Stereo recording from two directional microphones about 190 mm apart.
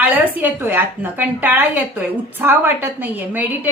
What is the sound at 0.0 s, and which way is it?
A woman's voice, 10° right (ahead or behind).